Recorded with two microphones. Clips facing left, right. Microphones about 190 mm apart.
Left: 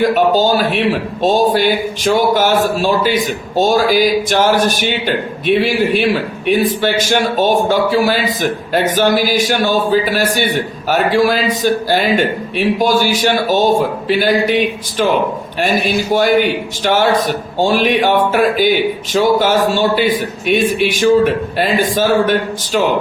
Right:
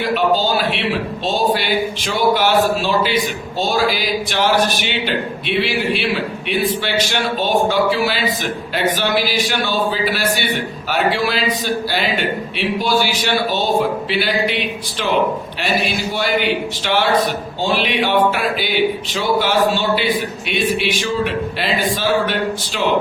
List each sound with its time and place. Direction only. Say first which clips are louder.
0.0 s a man's voice: left 5 dB; 45° left (ahead or behind)
16.1 s a man's voice: left 7 dB; 45° left (ahead or behind)